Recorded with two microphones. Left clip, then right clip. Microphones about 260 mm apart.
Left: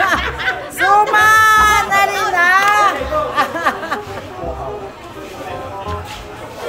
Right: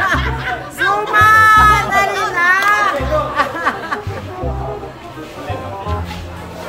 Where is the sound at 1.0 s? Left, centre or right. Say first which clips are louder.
Right 2 dB; left.